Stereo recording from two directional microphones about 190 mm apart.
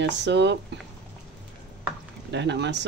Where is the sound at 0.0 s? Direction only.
65° right (ahead or behind).